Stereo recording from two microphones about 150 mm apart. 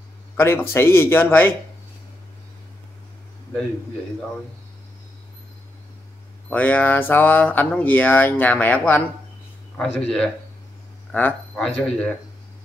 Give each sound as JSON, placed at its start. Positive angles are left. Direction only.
{"t": 0.4, "sound": "speech", "side_deg": 15}
{"t": 6.5, "sound": "speech", "side_deg": 10}